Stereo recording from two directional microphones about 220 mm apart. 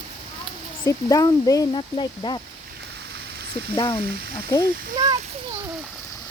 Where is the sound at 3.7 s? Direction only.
15° left (ahead or behind).